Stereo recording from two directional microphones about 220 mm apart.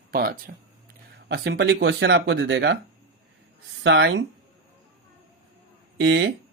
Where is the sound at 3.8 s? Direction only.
55° right (ahead or behind).